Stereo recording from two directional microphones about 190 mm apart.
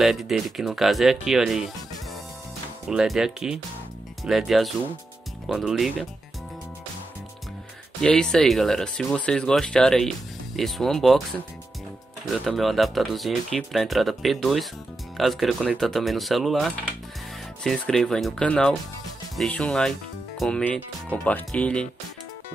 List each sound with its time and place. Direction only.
0.0 s speech: centre (ahead or behind)
2.9 s speech: 5° right (ahead or behind)
8.0 s speech: 5° left (ahead or behind)